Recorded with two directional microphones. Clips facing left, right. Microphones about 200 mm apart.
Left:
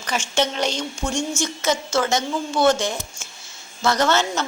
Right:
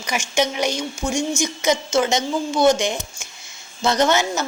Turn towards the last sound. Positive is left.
turn(degrees=-15)  # may be behind; listen again after turning